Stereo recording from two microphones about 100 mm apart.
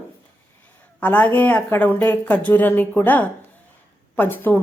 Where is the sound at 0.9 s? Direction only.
15° left (ahead or behind).